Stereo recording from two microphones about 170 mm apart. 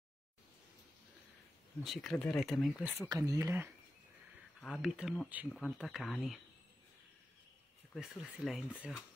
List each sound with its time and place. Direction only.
1.8 s speech: centre (ahead or behind); by 3.7 s 15° right (ahead or behind)
4.6 s speech: centre (ahead or behind)
7.9 s speech: centre (ahead or behind)